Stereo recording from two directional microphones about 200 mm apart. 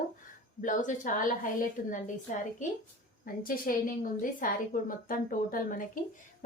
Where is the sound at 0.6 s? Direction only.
40° left (ahead or behind).